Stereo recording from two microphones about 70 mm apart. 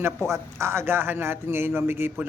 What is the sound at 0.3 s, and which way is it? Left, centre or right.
A man's voice, right.